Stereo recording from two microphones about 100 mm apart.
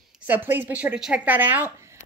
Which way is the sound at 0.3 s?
20° right (ahead or behind).